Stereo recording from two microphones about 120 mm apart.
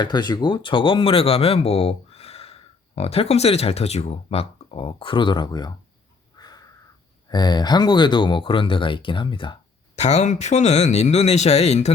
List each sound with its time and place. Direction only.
0.0 s speech: 35° left (ahead or behind)
6.3 s crow: 35° left (ahead or behind)
7.3 s speech: 35° left (ahead or behind)
9.9 s speech: 70° left (ahead or behind)